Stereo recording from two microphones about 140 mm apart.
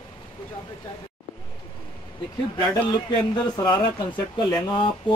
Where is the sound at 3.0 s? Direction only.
30° left (ahead or behind).